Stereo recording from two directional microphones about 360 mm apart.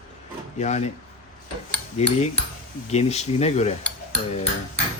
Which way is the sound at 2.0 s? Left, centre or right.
Centre.